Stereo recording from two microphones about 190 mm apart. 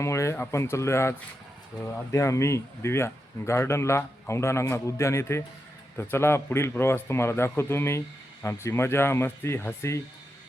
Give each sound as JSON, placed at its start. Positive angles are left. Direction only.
{"t": 0.0, "sound": "speech", "side_deg": 15}